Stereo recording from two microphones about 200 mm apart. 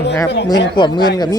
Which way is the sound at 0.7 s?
20° left (ahead or behind).